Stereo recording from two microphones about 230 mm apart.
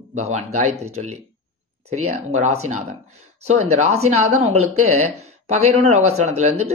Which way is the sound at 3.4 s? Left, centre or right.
Right.